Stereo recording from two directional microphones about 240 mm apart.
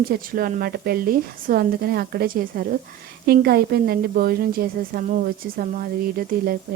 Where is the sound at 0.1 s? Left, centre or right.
Right.